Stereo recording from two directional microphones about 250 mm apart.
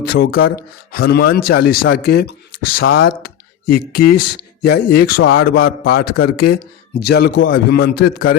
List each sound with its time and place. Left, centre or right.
0.1 s speech: left